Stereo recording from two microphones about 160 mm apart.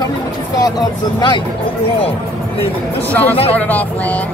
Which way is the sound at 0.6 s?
25° left (ahead or behind).